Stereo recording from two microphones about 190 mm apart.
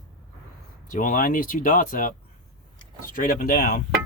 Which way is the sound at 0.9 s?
45° left (ahead or behind).